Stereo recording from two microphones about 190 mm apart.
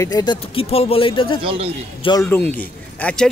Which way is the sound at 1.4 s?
30° right (ahead or behind).